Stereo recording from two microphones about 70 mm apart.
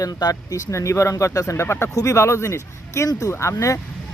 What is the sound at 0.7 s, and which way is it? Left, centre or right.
Speech, left.